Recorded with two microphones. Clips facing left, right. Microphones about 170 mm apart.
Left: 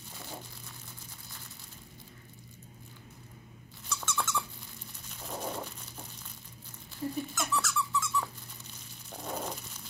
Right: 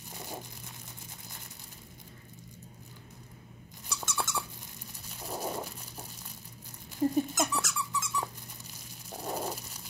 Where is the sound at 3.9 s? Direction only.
15° right (ahead or behind).